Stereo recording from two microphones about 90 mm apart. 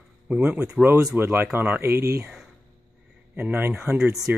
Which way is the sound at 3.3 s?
20° right (ahead or behind).